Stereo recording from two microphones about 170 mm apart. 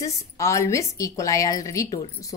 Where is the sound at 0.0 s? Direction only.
15° left (ahead or behind).